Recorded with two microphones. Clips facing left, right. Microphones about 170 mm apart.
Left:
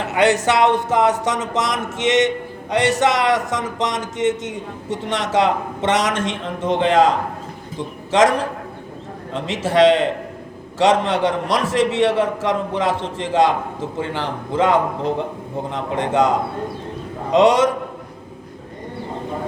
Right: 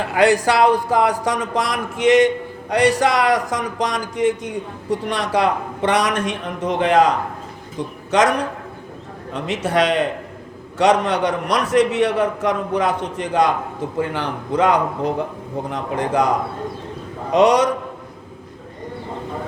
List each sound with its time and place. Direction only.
0.0 s speech: 25° left (ahead or behind)
9.5 s speech: 25° left (ahead or behind)